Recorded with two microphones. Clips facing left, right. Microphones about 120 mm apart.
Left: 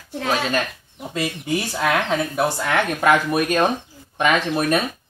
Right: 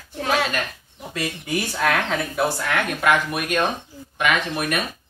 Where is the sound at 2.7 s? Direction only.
35° left (ahead or behind).